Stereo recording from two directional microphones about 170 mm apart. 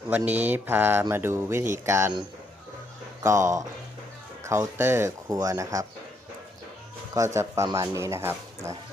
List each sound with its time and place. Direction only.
0.3 s speech: 10° right (ahead or behind)
3.2 s speech: 15° right (ahead or behind)
7.3 s speech: 15° right (ahead or behind)